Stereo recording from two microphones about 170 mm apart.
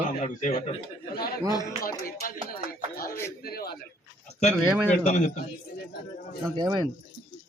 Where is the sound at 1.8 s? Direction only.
55° left (ahead or behind).